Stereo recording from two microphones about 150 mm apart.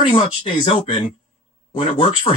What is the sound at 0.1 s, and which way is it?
Speech, 30° left (ahead or behind).